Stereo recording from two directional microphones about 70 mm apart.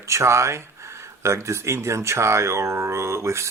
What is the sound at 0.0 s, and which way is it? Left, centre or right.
Speech, right.